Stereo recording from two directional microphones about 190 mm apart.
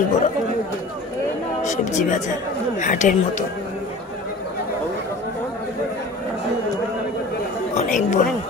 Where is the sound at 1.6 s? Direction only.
40° left (ahead or behind).